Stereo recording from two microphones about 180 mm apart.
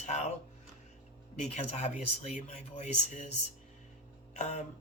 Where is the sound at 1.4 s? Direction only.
40° left (ahead or behind).